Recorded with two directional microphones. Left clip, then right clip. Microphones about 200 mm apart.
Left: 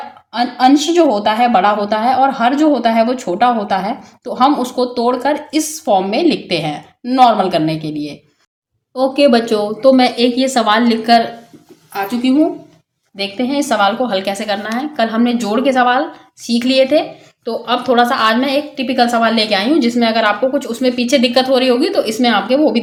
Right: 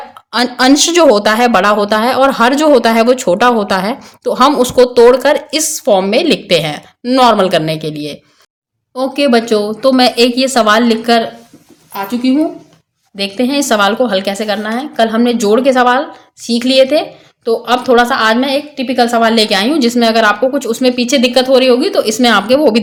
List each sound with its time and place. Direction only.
0.3 s speech: 40° right (ahead or behind)
9.0 s a woman's voice: 20° right (ahead or behind)
11.9 s speech: 10° right (ahead or behind)
13.1 s a woman's voice: 25° right (ahead or behind)